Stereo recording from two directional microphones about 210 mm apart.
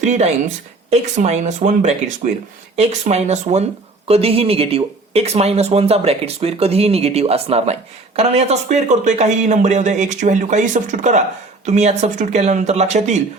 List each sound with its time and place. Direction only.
0.0 s speech: 35° right (ahead or behind)